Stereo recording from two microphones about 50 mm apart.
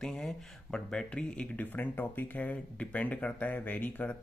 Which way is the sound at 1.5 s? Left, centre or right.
Left.